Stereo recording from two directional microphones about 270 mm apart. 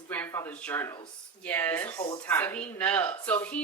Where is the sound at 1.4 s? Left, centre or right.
Centre.